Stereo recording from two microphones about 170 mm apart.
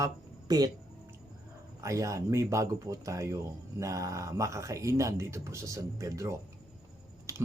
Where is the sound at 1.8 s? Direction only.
20° right (ahead or behind).